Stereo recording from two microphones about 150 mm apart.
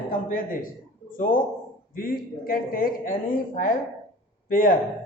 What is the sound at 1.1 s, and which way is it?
A man's voice, 60° left (ahead or behind).